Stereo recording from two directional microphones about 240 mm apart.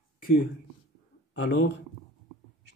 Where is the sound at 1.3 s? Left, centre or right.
Left.